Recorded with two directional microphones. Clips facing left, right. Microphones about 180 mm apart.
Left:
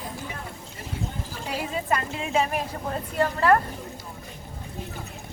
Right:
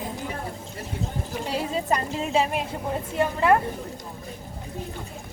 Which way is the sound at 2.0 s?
30° right (ahead or behind).